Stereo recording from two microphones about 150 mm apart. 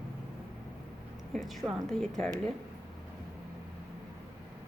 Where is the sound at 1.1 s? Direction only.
Centre (ahead or behind).